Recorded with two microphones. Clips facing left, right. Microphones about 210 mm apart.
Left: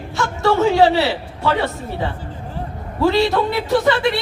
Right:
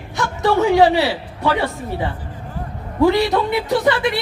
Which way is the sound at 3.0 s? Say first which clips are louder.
Right 1 dB; 15° right (ahead or behind).